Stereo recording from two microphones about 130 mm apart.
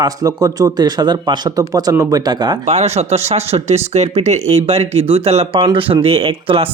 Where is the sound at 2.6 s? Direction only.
55° right (ahead or behind).